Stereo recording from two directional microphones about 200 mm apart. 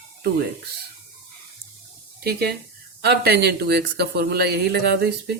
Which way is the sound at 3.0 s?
55° right (ahead or behind).